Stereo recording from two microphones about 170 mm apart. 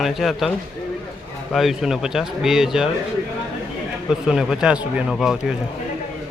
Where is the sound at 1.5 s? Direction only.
Centre (ahead or behind).